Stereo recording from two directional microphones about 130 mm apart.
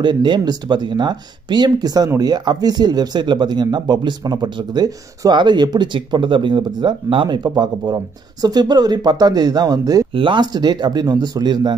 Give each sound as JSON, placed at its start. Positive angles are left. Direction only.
{"t": 0.0, "sound": "speech", "side_deg": -35}